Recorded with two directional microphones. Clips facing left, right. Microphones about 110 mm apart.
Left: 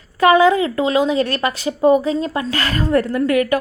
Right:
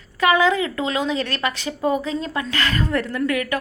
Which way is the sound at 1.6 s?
20° left (ahead or behind).